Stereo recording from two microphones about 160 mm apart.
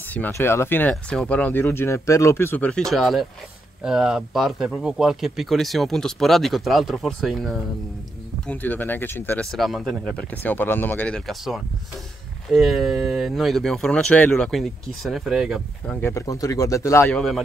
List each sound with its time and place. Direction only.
0.1 s speech: 10° left (ahead or behind)
8.5 s speech: 10° left (ahead or behind)
15.9 s speech: 15° left (ahead or behind)